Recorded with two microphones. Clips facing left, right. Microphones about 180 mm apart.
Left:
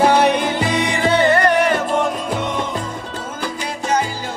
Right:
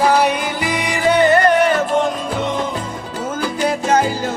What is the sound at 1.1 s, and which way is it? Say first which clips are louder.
Music: right 2 dB; 20° right (ahead or behind).